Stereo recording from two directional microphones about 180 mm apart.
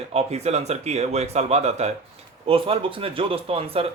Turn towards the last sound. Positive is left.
turn(degrees=-30)  # may be behind; listen again after turning